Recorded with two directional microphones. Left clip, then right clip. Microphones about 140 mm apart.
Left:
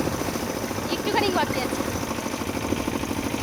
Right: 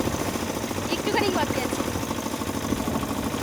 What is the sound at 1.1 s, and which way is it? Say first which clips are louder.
Vehicle: left 2 dB; 5° right (ahead or behind).